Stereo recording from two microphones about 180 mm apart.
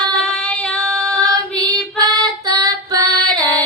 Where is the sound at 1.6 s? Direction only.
20° right (ahead or behind).